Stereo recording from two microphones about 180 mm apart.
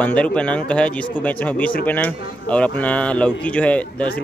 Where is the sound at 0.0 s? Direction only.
5° left (ahead or behind).